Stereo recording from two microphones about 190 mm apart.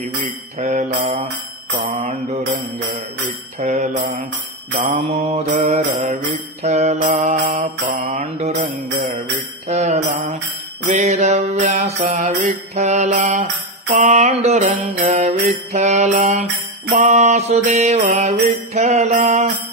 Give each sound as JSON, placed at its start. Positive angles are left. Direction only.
{"t": 0.6, "sound": "mantra", "side_deg": -35}
{"t": 3.5, "sound": "mantra", "side_deg": -40}
{"t": 4.7, "sound": "mantra", "side_deg": -30}
{"t": 10.9, "sound": "music", "side_deg": -35}
{"t": 13.8, "sound": "mantra", "side_deg": -50}
{"t": 14.1, "sound": "mantra", "side_deg": -35}